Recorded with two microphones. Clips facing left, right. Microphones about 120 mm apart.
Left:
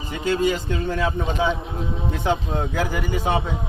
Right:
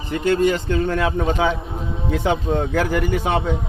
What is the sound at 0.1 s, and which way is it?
Speech, 60° right (ahead or behind).